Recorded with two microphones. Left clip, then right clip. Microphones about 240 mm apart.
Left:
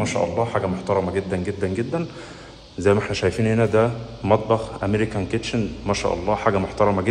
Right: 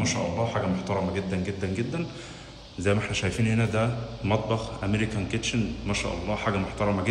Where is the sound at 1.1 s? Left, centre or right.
Centre.